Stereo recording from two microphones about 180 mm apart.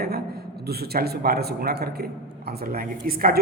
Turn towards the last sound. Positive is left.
turn(degrees=-55)  # may be behind; listen again after turning